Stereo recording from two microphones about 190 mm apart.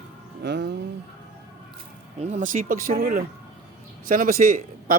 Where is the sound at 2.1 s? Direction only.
40° right (ahead or behind).